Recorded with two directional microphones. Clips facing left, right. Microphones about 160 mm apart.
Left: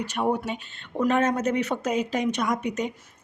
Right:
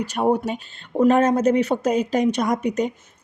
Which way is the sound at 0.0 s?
35° right (ahead or behind).